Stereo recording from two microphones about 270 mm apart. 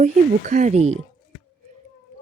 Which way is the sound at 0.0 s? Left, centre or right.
Right.